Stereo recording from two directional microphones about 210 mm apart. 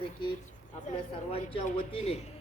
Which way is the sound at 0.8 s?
30° left (ahead or behind).